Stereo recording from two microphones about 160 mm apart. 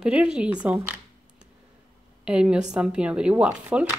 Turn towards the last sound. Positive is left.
turn(degrees=-5)  # may be behind; listen again after turning